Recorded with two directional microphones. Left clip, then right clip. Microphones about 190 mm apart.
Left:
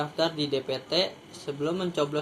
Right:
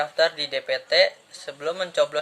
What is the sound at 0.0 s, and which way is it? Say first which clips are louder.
Speech: right 6 dB; 40° right (ahead or behind).